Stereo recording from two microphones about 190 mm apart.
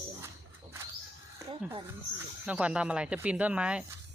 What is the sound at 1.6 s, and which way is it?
Speech, 5° right (ahead or behind).